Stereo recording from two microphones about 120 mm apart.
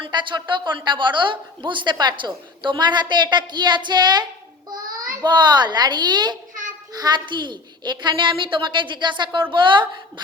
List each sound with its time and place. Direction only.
0.0 s a woman's voice: 40° right (ahead or behind)